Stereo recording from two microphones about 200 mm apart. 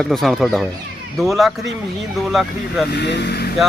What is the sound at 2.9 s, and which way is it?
Speech, 60° left (ahead or behind).